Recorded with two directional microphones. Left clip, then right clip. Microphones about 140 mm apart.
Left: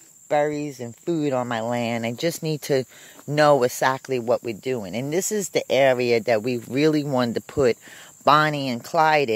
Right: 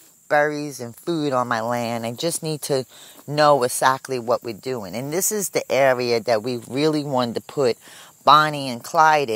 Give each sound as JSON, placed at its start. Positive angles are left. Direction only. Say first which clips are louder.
{"t": 0.4, "sound": "speech", "louder": "right 2 dB", "side_deg": 15}